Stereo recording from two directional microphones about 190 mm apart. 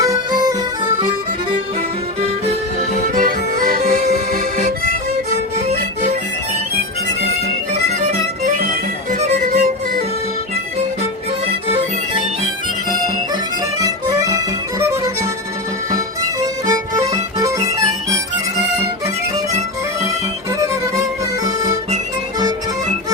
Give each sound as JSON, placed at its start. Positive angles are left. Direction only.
{"t": 0.0, "sound": "music", "side_deg": -20}
{"t": 3.2, "sound": "accordion", "side_deg": -45}
{"t": 5.6, "sound": "music", "side_deg": -35}
{"t": 8.4, "sound": "music", "side_deg": -45}
{"t": 13.7, "sound": "music", "side_deg": -20}
{"t": 16.4, "sound": "music", "side_deg": -20}
{"t": 21.4, "sound": "accordion", "side_deg": -20}